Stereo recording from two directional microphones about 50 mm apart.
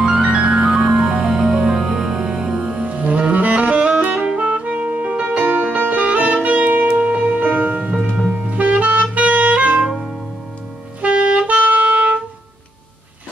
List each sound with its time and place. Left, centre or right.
0.0 s music: centre
7.9 s music: centre
8.3 s music: right
11.0 s music: right